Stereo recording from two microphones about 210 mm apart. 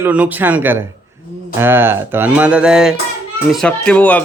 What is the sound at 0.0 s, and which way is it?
A man's voice, 5° right (ahead or behind).